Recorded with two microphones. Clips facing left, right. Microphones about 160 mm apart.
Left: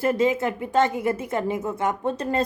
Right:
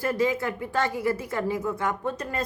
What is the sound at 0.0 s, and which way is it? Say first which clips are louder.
A woman's voice: left 4 dB; 25° left (ahead or behind).